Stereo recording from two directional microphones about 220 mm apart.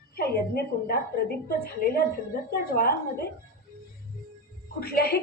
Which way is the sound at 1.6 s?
45° left (ahead or behind).